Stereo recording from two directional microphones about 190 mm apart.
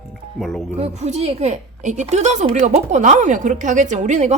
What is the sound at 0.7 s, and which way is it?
A woman's voice, 35° right (ahead or behind).